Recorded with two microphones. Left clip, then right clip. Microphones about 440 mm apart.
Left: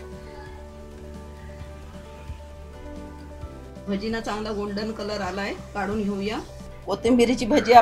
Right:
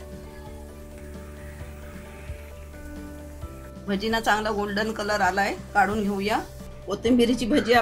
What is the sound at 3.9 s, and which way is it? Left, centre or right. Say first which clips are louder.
A woman's voice: right 6 dB; centre.